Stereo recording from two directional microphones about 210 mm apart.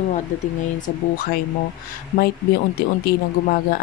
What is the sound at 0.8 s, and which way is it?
Speech, 45° left (ahead or behind).